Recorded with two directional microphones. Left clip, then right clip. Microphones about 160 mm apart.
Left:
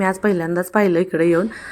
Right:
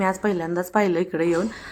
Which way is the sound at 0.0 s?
25° left (ahead or behind).